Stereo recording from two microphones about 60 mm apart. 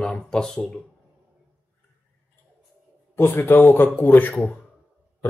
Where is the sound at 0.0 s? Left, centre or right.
Centre.